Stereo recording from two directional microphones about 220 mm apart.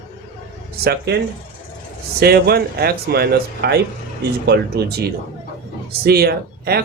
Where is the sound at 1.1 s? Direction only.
50° right (ahead or behind).